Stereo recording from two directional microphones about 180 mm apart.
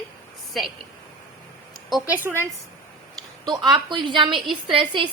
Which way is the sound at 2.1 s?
10° right (ahead or behind).